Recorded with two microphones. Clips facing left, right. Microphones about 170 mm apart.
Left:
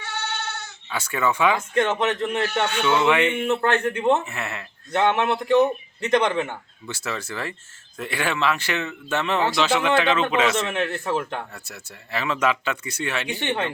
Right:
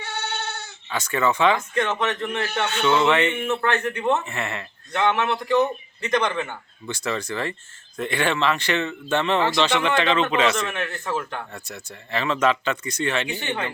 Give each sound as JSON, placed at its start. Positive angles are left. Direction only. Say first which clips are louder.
{"t": 0.9, "sound": "speech", "louder": "right 1 dB", "side_deg": 10}
{"t": 1.7, "sound": "speech", "louder": "left 2 dB", "side_deg": 30}
{"t": 2.6, "sound": "speech", "louder": "right 2 dB", "side_deg": 10}
{"t": 3.5, "sound": "speech", "louder": "left 2 dB", "side_deg": 30}
{"t": 4.3, "sound": "a man's voice", "louder": "right 2 dB", "side_deg": 5}
{"t": 5.0, "sound": "speech", "louder": "left 1 dB", "side_deg": 30}
{"t": 6.8, "sound": "a man's voice", "louder": "right 4 dB", "side_deg": 5}
{"t": 10.7, "sound": "speech", "louder": "left 3 dB", "side_deg": 30}
{"t": 11.5, "sound": "speech", "louder": "right 3 dB", "side_deg": 5}